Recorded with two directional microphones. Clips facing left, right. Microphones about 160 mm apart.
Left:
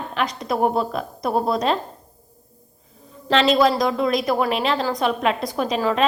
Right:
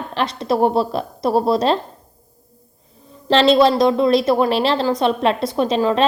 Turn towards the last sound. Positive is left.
turn(degrees=-25)  # may be behind; listen again after turning